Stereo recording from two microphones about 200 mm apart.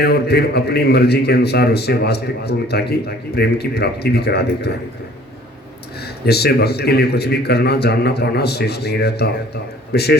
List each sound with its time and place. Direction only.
0.0 s a man's voice: 50° left (ahead or behind)
6.2 s a man's voice: 55° left (ahead or behind)